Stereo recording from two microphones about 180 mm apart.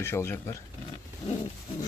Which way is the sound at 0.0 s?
15° left (ahead or behind).